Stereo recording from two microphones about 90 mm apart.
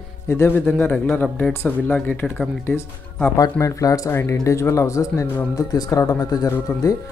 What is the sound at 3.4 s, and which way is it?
Speech, 40° left (ahead or behind).